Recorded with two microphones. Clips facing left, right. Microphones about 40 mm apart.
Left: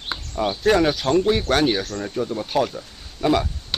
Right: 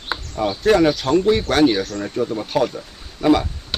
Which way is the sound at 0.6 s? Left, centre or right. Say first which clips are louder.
Right 3 dB; centre.